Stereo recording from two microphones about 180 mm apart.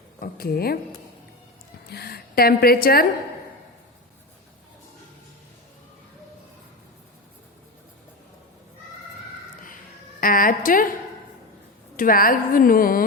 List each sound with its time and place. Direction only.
0.2 s speech: 55° left (ahead or behind)
1.9 s a woman's voice: 60° left (ahead or behind)
10.2 s a sound: 50° left (ahead or behind)
11.9 s a woman's voice: 50° left (ahead or behind)